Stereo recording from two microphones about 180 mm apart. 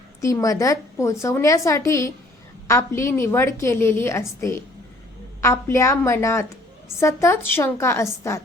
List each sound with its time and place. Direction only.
0.2 s a woman's voice: 15° left (ahead or behind)